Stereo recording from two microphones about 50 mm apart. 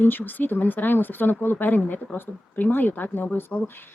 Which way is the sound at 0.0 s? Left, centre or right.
Left.